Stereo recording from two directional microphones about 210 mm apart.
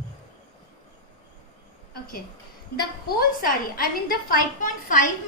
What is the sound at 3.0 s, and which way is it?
A woman's voice, 45° left (ahead or behind).